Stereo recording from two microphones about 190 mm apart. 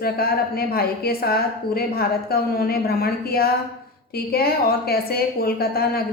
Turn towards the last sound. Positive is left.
turn(degrees=55)  # may be behind; listen again after turning